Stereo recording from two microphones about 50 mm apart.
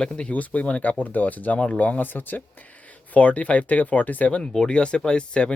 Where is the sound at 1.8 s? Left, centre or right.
Left.